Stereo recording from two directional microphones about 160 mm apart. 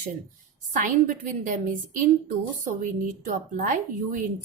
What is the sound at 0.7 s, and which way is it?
A woman's voice, 55° right (ahead or behind).